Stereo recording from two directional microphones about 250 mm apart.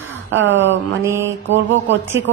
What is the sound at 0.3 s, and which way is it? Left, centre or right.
Speech, right.